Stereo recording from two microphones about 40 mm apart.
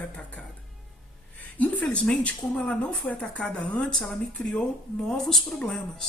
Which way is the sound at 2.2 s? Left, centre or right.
Left.